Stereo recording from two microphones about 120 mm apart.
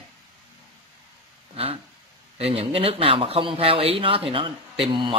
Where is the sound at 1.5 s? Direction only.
55° right (ahead or behind).